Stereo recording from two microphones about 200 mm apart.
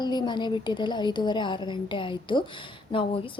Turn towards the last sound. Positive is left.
turn(degrees=25)  # may be behind; listen again after turning